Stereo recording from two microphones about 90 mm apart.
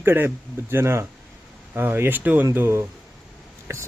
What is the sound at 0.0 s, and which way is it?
Speech, 25° right (ahead or behind).